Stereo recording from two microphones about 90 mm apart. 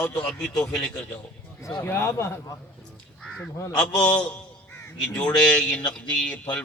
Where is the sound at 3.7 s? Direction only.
10° left (ahead or behind).